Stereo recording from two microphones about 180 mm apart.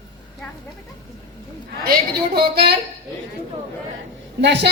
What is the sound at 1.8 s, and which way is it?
Speech, 55° right (ahead or behind).